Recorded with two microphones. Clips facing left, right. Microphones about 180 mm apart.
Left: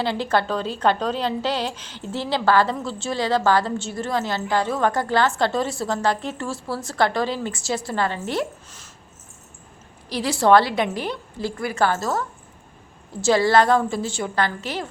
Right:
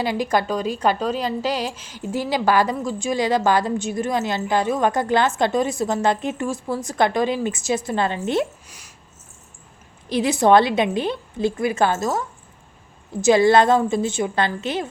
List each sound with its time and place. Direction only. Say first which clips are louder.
0.0 s a woman's voice: right 1 dB; 15° right (ahead or behind)
10.1 s a woman's voice: right 1 dB; 20° right (ahead or behind)
13.2 s a woman's voice: right 3 dB; 20° right (ahead or behind)